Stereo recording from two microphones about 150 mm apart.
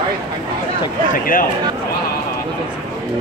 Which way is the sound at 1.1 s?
70° left (ahead or behind).